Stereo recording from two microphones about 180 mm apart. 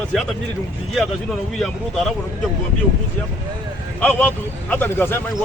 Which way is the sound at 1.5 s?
5° left (ahead or behind).